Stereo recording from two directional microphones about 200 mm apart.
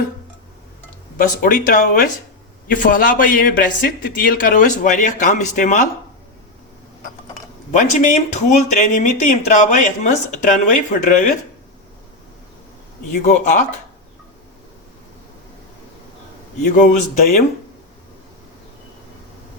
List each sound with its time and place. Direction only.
1.2 s a man's voice: 40° left (ahead or behind)
7.7 s speech: 35° left (ahead or behind)
13.2 s speech: 40° left (ahead or behind)
16.6 s speech: 40° left (ahead or behind)